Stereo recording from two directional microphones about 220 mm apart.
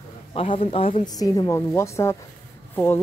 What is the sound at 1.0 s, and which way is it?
Speech, 15° left (ahead or behind).